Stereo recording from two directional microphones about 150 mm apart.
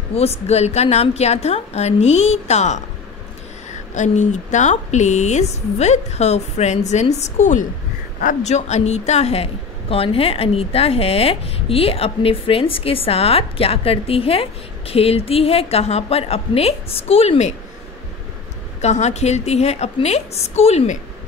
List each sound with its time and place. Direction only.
0.1 s speech: 45° left (ahead or behind)
3.9 s a woman's voice: 55° left (ahead or behind)
18.8 s speech: 50° left (ahead or behind)